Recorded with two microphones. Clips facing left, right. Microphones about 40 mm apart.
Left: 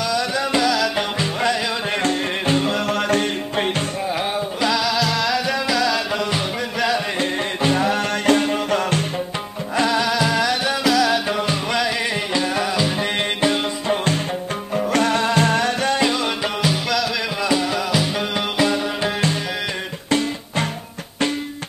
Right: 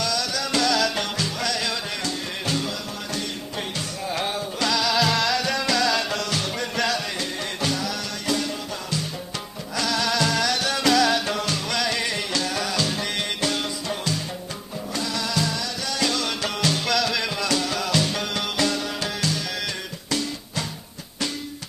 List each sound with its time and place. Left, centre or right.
0.0 s music: left
1.2 s music: left
2.9 s music: left
4.1 s music: centre
4.9 s music: centre
6.1 s music: centre
7.2 s music: left
9.8 s music: left
14.9 s music: left
16.0 s music: left
20.1 s music: left